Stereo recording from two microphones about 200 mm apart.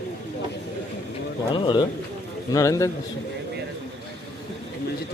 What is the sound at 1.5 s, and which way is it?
A man's voice, 25° left (ahead or behind).